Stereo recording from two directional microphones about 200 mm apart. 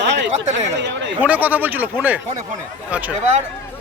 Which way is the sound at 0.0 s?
60° right (ahead or behind).